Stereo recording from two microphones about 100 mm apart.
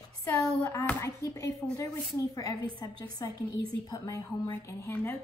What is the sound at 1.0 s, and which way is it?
Speech, 30° left (ahead or behind).